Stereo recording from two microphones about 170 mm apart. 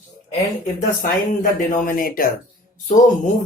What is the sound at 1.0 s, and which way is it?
Speech, 50° left (ahead or behind).